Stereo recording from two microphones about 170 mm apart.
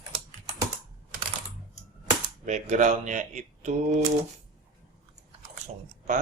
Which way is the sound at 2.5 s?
45° right (ahead or behind).